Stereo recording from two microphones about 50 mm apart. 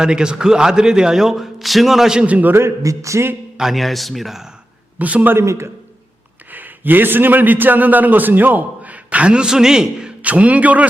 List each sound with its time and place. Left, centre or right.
0.0 s a man's voice: centre
2.2 s a man's voice: right
2.5 s speech: right
3.6 s speech: centre
4.9 s speech: right
5.3 s a man's voice: right
6.5 s a man's voice: right; by 10.1 s centre
10.2 s a man's voice: right